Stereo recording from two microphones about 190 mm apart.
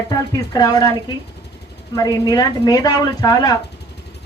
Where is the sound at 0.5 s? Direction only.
20° left (ahead or behind).